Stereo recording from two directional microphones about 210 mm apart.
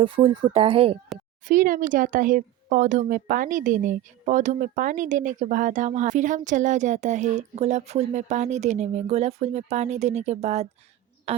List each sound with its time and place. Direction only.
0.0 s a woman's voice: 25° right (ahead or behind)
1.5 s speech: 40° right (ahead or behind)